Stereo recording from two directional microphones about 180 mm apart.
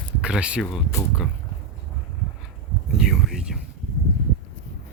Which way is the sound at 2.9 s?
Centre (ahead or behind).